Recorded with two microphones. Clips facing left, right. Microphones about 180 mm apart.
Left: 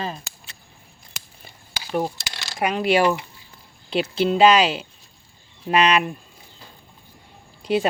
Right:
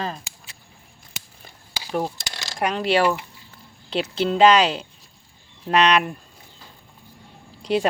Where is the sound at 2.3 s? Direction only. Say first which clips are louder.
Right 1 dB; 40° right (ahead or behind).